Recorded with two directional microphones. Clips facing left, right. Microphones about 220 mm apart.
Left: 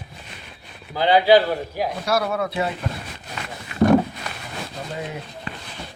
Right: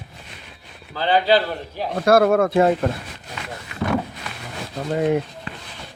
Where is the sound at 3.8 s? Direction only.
45° left (ahead or behind).